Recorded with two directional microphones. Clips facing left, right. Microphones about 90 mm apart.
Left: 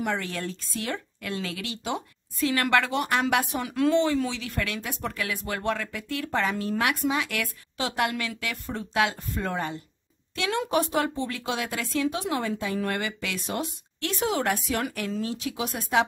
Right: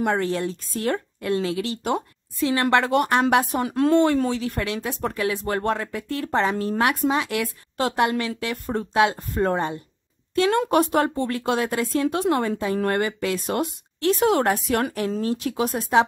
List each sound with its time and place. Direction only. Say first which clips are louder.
0.0 s a woman's voice: right 7 dB; 40° right (ahead or behind)
1.4 s a woman's voice: right 8 dB; 30° right (ahead or behind)
3.9 s a woman's voice: right 7 dB; 50° right (ahead or behind)
4.6 s speech: right 5 dB; 30° right (ahead or behind)
7.7 s a woman's voice: right 7 dB; 45° right (ahead or behind)
8.0 s a woman's voice: right 5 dB; 30° right (ahead or behind)
9.3 s a woman's voice: right 7 dB; 40° right (ahead or behind)
14.4 s speech: right 5 dB; 40° right (ahead or behind)
15.7 s speech: right 4 dB; 30° right (ahead or behind)